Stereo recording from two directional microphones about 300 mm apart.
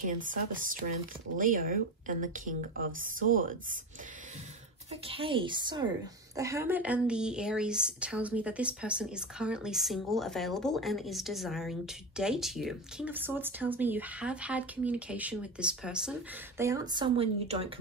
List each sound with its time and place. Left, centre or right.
0.0 s a woman's voice: right
5.0 s a woman's voice: centre